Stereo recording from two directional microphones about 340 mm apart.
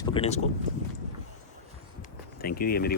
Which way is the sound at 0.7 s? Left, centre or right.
Right.